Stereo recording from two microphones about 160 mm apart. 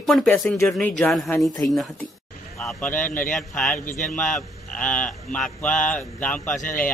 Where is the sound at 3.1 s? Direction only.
55° left (ahead or behind).